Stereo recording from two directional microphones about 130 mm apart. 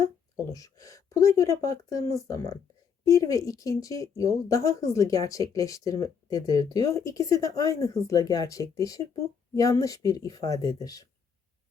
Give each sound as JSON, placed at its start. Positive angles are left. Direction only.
{"t": 0.5, "sound": "speech", "side_deg": 25}